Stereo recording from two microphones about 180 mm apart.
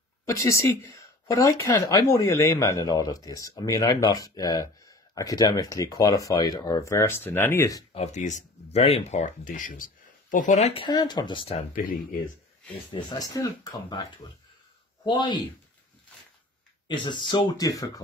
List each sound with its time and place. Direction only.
0.2 s speech: 15° left (ahead or behind)
7.9 s speech: 40° left (ahead or behind)
11.7 s speech: 50° left (ahead or behind)
12.9 s speech: 20° left (ahead or behind)
15.0 s speech: 25° left (ahead or behind)
16.8 s speech: 25° left (ahead or behind)